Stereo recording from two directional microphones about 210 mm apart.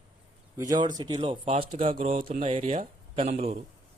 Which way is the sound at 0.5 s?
15° right (ahead or behind).